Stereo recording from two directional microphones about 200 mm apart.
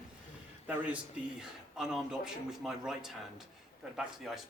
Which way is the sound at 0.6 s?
5° right (ahead or behind).